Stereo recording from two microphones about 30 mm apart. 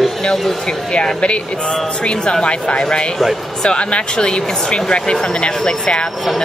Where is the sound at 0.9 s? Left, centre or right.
Left.